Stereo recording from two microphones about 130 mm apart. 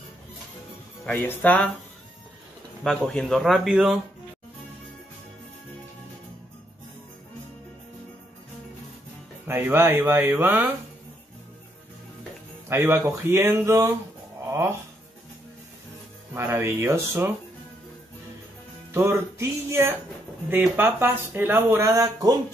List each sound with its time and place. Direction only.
1.0 s speech: 15° left (ahead or behind)
3.1 s speech: centre (ahead or behind)
9.5 s speech: 15° right (ahead or behind)
12.6 s speech: 20° right (ahead or behind)
14.4 s music: 20° right (ahead or behind)
16.3 s speech: 20° right (ahead or behind)
18.9 s speech: 20° right (ahead or behind)